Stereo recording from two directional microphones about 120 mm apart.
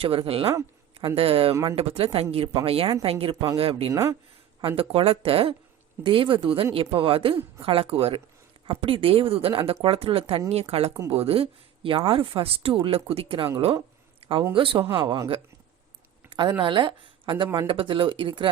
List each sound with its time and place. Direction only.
0.0 s speech: 50° right (ahead or behind)
3.9 s speech: 25° right (ahead or behind)
4.6 s speech: 50° right (ahead or behind)
14.2 s a sound: 50° right (ahead or behind)
14.5 s speech: 45° right (ahead or behind)
16.3 s speech: 40° right (ahead or behind)